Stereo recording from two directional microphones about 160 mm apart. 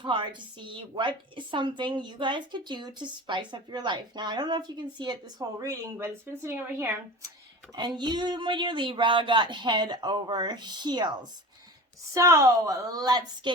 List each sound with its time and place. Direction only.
0.0 s a woman's voice: 30° right (ahead or behind); by 7.3 s 15° right (ahead or behind)
7.8 s a woman's voice: 30° right (ahead or behind)